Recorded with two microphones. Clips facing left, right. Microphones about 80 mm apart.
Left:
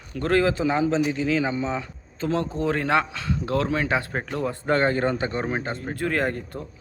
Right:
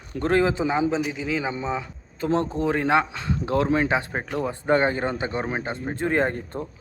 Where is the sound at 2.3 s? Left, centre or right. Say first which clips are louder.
Right 2 dB; right.